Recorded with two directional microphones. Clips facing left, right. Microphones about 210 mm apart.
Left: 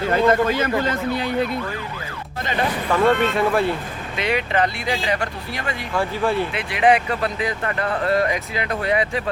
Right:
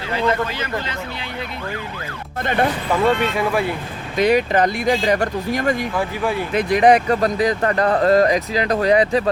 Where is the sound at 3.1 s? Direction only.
50° left (ahead or behind).